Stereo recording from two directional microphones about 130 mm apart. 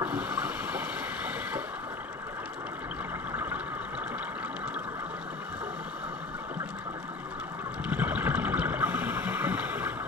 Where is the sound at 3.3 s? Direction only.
15° right (ahead or behind).